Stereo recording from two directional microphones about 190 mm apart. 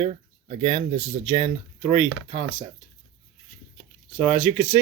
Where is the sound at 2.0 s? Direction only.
90° right.